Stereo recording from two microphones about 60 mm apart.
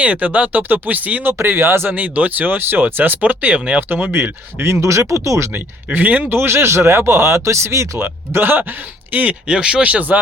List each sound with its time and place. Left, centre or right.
0.0 s speech: right
1.3 s speech: right
2.0 s speech: right
4.7 s speech: right
5.5 s speech: right
6.3 s speech: right
8.3 s speech: right
9.5 s speech: centre